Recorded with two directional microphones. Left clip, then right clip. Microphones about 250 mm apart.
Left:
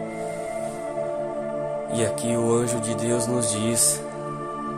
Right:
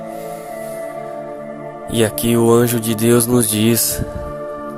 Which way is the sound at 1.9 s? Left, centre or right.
Right.